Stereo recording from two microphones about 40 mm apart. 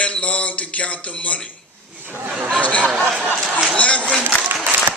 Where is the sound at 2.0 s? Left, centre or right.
Right.